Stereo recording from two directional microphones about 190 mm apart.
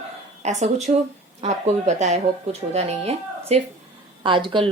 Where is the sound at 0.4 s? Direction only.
40° right (ahead or behind).